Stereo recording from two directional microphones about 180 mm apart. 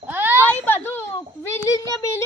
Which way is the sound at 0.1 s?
10° right (ahead or behind).